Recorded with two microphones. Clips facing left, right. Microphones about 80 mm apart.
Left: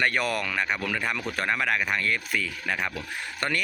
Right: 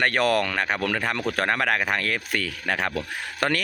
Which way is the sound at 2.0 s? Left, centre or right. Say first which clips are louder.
Right 1 dB; right.